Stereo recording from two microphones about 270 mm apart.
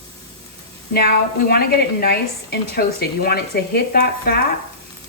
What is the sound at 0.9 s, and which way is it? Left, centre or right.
A woman's voice, left.